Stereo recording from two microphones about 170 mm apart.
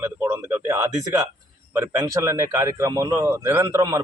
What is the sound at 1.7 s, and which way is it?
Speech, 15° right (ahead or behind).